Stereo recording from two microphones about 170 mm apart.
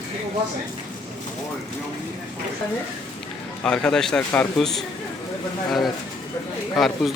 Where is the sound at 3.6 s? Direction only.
5° left (ahead or behind).